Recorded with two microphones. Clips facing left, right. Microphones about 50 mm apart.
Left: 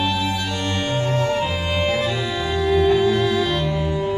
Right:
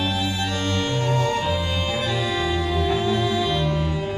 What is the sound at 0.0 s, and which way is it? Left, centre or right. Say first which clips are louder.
Music: left 3 dB; centre.